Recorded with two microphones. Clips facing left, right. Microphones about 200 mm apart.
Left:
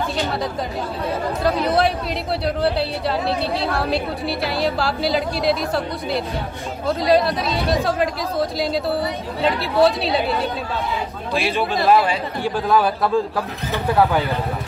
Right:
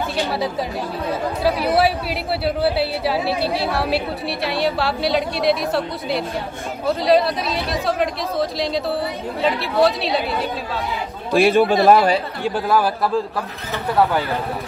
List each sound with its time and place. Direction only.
1.4 s a woman's voice: 5° right (ahead or behind)
11.3 s speech: 50° right (ahead or behind)
12.6 s a woman's voice: centre (ahead or behind)